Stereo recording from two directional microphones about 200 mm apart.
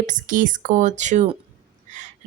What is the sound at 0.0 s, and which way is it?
Speech, 40° right (ahead or behind).